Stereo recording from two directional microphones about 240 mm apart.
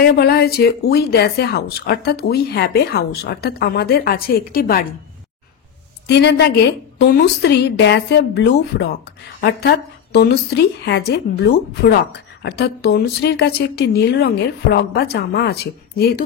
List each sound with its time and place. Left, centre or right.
0.0 s a woman's voice: left
6.0 s a woman's voice: left